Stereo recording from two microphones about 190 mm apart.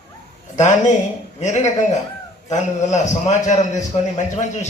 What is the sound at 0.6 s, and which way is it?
A man's voice, 40° left (ahead or behind).